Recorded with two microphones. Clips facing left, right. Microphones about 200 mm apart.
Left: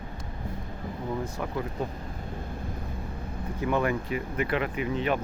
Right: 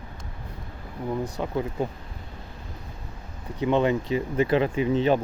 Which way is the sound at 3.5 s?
20° right (ahead or behind).